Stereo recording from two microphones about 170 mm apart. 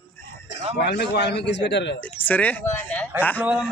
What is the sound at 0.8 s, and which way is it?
A man's voice, 75° left (ahead or behind).